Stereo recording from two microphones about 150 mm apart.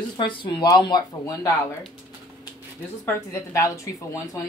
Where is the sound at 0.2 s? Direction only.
35° left (ahead or behind).